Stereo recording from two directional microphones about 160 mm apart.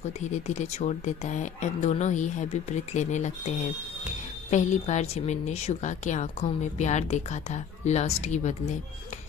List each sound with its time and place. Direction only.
0.3 s a woman's voice: 45° left (ahead or behind)